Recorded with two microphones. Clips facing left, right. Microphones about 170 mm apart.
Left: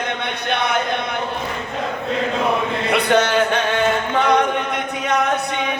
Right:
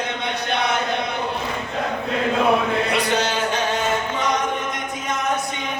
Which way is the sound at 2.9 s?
60° left (ahead or behind).